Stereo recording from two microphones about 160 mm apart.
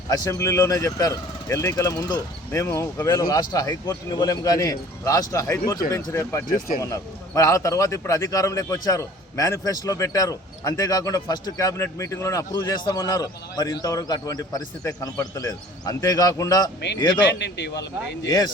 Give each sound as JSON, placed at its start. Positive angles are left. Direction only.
{"t": 0.1, "sound": "a man's voice", "side_deg": 20}
{"t": 17.2, "sound": "a man's voice", "side_deg": 90}
{"t": 18.3, "sound": "a man's voice", "side_deg": 25}